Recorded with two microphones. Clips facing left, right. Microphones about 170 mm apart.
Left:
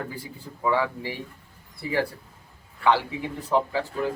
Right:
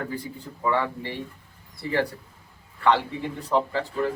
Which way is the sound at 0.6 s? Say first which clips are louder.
Left 1 dB; 5° left (ahead or behind).